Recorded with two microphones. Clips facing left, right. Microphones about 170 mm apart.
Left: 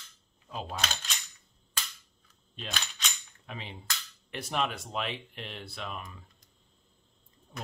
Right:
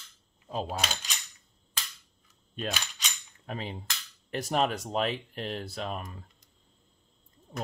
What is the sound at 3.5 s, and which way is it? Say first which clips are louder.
Speech: right 5 dB; 40° right (ahead or behind).